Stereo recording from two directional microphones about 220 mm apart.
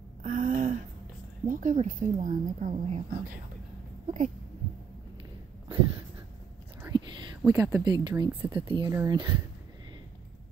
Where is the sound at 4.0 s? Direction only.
35° right (ahead or behind).